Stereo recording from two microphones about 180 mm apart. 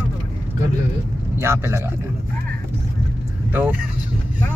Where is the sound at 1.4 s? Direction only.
15° right (ahead or behind).